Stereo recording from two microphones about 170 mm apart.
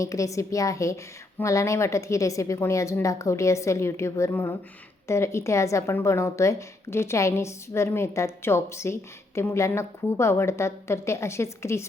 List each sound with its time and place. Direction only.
0.0 s a woman's voice: 20° left (ahead or behind)